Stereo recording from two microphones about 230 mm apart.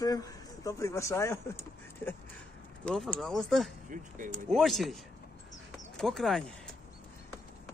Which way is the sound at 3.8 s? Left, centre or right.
Right.